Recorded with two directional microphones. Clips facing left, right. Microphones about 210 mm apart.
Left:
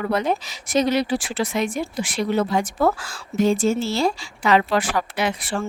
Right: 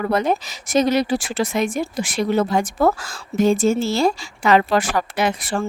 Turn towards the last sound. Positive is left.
turn(degrees=-45)  # may be behind; listen again after turning